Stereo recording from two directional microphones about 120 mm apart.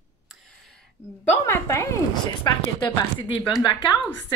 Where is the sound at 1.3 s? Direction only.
25° left (ahead or behind).